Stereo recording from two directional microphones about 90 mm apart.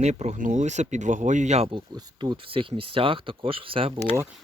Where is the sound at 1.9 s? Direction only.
55° right (ahead or behind).